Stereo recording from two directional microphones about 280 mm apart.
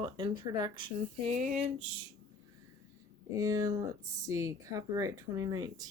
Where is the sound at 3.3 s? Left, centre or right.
Centre.